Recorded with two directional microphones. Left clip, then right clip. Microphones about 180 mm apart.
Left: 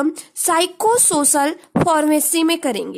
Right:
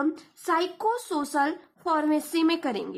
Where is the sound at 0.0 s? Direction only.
50° left (ahead or behind).